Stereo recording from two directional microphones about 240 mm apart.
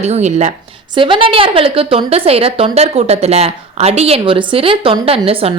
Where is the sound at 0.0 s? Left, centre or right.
Right.